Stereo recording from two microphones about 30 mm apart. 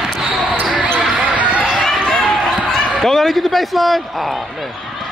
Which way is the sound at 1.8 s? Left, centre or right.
Centre.